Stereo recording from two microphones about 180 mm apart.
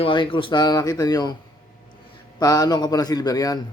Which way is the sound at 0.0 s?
30° left (ahead or behind).